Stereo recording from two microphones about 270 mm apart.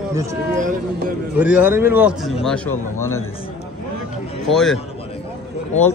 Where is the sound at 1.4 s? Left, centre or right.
Centre.